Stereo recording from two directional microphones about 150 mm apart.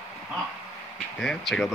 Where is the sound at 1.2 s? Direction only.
5° left (ahead or behind).